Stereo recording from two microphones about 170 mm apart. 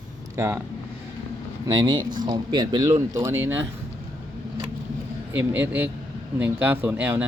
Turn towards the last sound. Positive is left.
turn(degrees=-10)  # may be behind; listen again after turning